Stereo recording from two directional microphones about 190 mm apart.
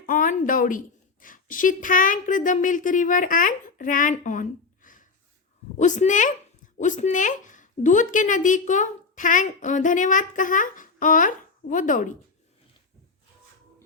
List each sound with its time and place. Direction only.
0.0 s a woman's voice: 45° left (ahead or behind)